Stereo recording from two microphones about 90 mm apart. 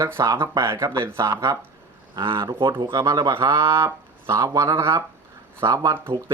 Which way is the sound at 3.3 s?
30° right (ahead or behind).